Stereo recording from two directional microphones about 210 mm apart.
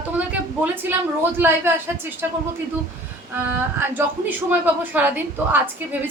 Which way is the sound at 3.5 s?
10° right (ahead or behind).